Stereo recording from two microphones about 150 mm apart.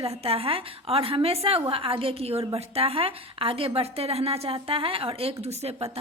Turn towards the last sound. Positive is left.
turn(degrees=-40)  # may be behind; listen again after turning